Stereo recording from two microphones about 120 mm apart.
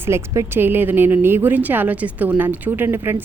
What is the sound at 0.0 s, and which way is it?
A woman's voice, 20° right (ahead or behind).